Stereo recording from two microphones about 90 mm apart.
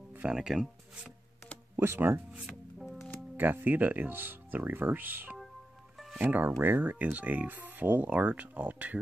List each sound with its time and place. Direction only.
0.1 s speech: 10° right (ahead or behind)
1.8 s speech: 25° right (ahead or behind)
2.4 s music: centre (ahead or behind)
3.3 s speech: 20° right (ahead or behind)